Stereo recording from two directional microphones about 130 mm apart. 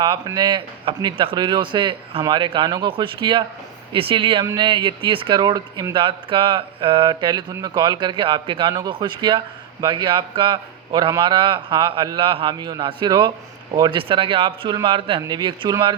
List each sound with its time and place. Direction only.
0.3 s speech: 30° right (ahead or behind)